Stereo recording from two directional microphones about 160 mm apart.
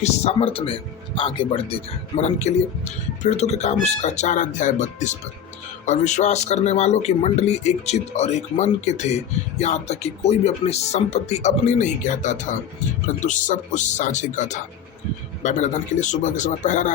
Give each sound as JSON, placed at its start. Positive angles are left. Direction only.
{"t": 0.0, "sound": "speech", "side_deg": 40}